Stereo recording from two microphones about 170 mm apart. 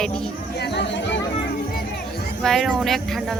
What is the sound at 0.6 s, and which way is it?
Chatter, 85° left.